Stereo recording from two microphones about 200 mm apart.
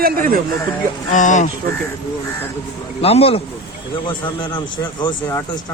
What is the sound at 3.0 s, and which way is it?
A man's voice, 30° left (ahead or behind).